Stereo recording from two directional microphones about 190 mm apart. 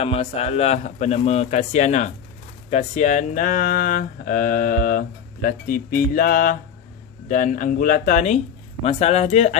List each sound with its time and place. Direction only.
0.0 s speech: 30° left (ahead or behind)